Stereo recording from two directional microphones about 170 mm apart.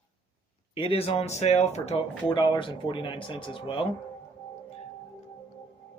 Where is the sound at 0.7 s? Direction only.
35° left (ahead or behind).